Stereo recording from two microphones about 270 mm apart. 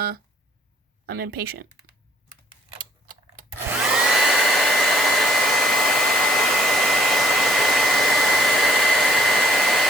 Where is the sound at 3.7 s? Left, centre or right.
Centre.